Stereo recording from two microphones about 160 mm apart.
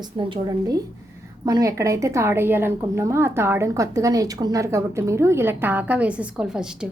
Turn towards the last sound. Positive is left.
turn(degrees=-5)  # may be behind; listen again after turning